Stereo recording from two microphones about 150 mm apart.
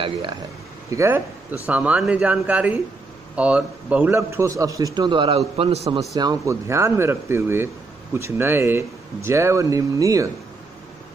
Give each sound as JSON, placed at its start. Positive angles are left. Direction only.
{"t": 0.0, "sound": "speech", "side_deg": -35}
{"t": 0.8, "sound": "a man's voice", "side_deg": -20}
{"t": 6.1, "sound": "speech", "side_deg": -25}